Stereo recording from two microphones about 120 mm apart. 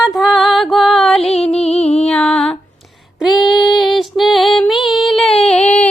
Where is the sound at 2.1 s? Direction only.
5° left (ahead or behind).